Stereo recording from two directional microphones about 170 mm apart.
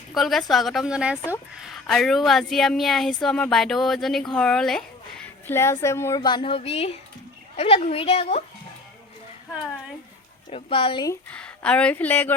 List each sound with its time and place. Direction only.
0.1 s a woman's voice: centre (ahead or behind); by 8.4 s 35° left (ahead or behind)
10.5 s a woman's voice: 35° left (ahead or behind)
11.3 s speech: 5° left (ahead or behind)